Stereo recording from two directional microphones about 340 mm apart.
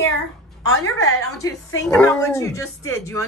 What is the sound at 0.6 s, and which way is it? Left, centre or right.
Speech, left.